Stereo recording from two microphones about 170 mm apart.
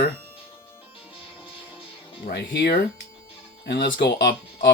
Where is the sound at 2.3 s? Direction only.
80° left.